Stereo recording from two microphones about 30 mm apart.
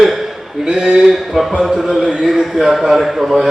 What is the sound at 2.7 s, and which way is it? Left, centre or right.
Speech, centre.